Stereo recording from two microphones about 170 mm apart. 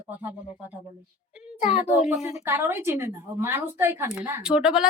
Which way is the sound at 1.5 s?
45° left (ahead or behind).